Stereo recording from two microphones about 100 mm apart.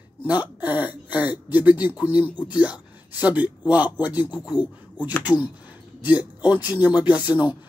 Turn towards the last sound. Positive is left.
turn(degrees=-15)  # may be behind; listen again after turning